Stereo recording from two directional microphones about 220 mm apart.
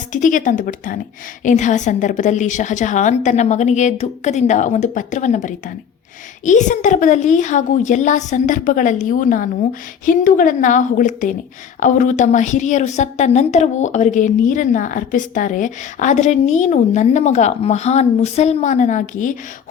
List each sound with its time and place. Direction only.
0.1 s a woman's voice: 35° left (ahead or behind)